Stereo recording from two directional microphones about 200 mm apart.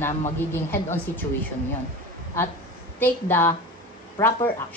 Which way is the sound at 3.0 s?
10° left (ahead or behind).